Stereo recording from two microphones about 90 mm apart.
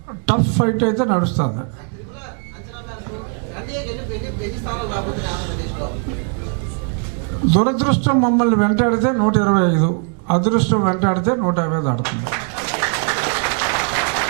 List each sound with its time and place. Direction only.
0.3 s a man's voice: 15° right (ahead or behind)
4.6 s speech: 15° right (ahead or behind)
7.5 s a man's voice: 15° right (ahead or behind)